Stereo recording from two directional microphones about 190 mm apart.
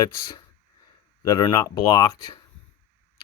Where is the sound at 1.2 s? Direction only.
20° left (ahead or behind).